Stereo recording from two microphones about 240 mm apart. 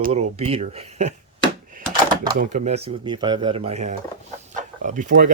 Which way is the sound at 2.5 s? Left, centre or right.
Right.